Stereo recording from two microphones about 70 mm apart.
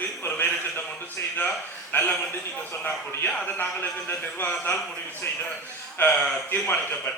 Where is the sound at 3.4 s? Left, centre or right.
Left.